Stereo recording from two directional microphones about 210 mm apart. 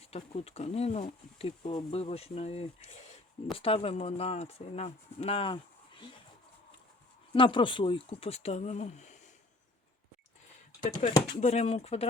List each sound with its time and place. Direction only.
0.1 s speech: 30° left (ahead or behind)
7.3 s speech: 25° left (ahead or behind)
11.0 s speech: 40° left (ahead or behind)